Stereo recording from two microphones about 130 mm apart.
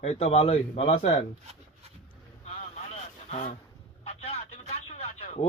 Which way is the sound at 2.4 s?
60° left (ahead or behind).